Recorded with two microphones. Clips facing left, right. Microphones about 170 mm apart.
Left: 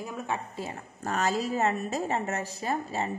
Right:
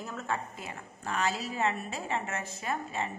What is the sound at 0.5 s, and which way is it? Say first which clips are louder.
A woman's voice: left 6 dB; 35° left (ahead or behind).